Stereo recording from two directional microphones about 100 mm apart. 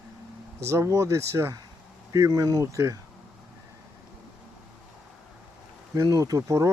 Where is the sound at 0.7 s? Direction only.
30° right (ahead or behind).